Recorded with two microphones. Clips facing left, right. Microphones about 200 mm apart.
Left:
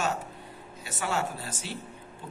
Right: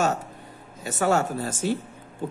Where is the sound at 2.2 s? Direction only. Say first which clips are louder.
Right 13 dB; 45° right (ahead or behind).